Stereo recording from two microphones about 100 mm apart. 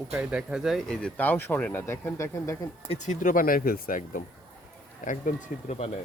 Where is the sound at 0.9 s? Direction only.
15° left (ahead or behind).